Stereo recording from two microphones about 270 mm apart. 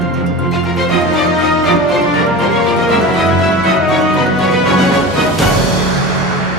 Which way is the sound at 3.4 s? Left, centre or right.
Centre.